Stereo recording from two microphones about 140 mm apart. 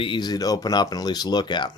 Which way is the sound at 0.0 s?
30° left (ahead or behind).